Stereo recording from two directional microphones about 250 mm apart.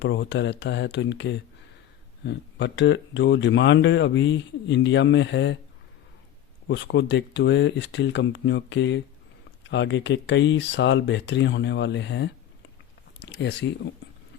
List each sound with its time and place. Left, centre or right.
0.0 s speech: left
6.7 s speech: left
13.1 s a sound: left